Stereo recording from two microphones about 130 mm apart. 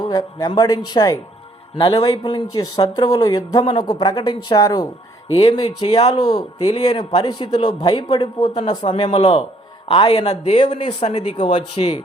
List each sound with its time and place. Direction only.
0.0 s a man's voice: 30° left (ahead or behind); by 9.4 s 50° left (ahead or behind)
9.9 s speech: 40° left (ahead or behind); by 11.5 s 65° left (ahead or behind)
11.5 s speech: 45° left (ahead or behind)